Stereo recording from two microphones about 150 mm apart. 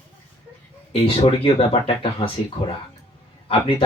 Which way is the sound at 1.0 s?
35° left (ahead or behind).